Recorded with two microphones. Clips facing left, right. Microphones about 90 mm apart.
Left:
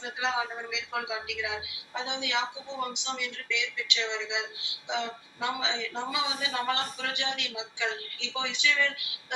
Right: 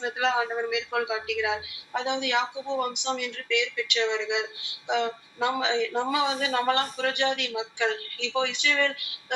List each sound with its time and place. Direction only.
0.0 s a woman's voice: 55° right (ahead or behind)